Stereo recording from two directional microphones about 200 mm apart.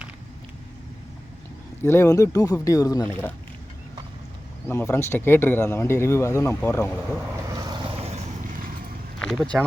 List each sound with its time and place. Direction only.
1.8 s speech: 10° left (ahead or behind)
4.7 s speech: 10° left (ahead or behind)
7.1 s vehicle: 10° right (ahead or behind); by 8.2 s 30° right (ahead or behind)
9.2 s speech: centre (ahead or behind)